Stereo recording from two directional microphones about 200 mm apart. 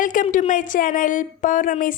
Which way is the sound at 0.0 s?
40° left (ahead or behind).